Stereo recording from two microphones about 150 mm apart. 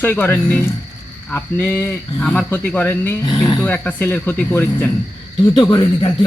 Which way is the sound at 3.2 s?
30° left (ahead or behind).